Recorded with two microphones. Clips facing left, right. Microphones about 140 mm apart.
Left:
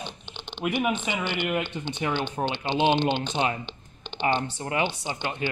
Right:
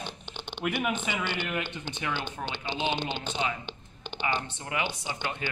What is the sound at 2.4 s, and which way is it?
Speech, 35° left (ahead or behind).